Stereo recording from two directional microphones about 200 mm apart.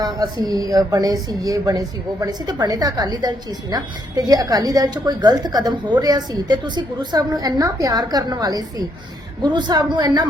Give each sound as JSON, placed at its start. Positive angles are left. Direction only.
{"t": 0.0, "sound": "a woman's voice", "side_deg": -20}